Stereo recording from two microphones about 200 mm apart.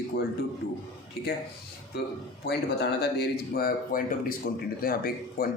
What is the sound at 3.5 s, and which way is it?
A man's voice, 45° left (ahead or behind).